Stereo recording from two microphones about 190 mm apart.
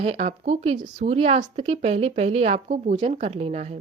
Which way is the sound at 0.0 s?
35° right (ahead or behind).